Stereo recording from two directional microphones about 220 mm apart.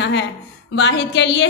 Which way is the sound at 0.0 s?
55° left (ahead or behind).